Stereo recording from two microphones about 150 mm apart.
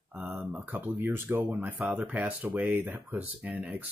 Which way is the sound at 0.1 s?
10° right (ahead or behind).